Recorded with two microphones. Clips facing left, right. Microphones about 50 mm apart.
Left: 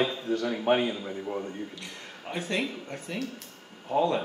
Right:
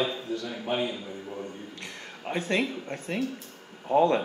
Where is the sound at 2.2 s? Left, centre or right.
Right.